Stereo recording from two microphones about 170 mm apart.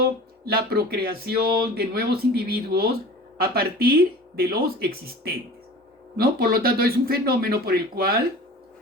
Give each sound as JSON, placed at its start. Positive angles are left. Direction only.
{"t": 0.0, "sound": "speech", "side_deg": -65}